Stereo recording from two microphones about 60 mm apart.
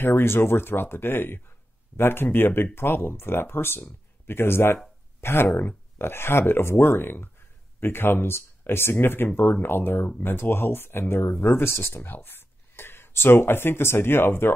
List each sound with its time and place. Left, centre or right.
0.0 s speech: left